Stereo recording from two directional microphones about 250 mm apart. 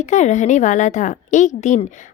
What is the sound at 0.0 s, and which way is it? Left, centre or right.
A woman's voice, left.